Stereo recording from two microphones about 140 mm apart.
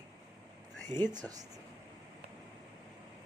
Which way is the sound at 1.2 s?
25° right (ahead or behind).